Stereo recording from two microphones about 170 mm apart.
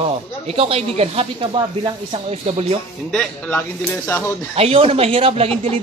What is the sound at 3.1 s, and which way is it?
A man's voice, 5° left (ahead or behind).